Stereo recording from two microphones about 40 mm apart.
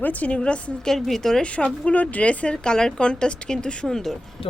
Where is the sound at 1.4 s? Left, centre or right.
Left.